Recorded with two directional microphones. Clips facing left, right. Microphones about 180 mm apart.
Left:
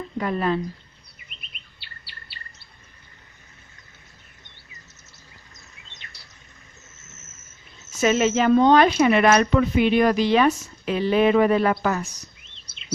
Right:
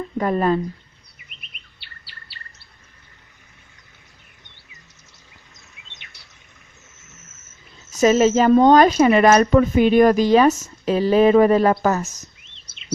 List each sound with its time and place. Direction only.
0.2 s speech: 40° right (ahead or behind)
5.5 s bird: 20° right (ahead or behind)
7.9 s speech: 35° right (ahead or behind)